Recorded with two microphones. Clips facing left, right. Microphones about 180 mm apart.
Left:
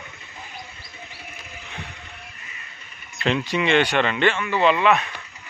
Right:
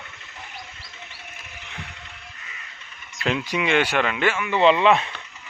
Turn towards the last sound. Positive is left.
turn(degrees=-25)  # may be behind; listen again after turning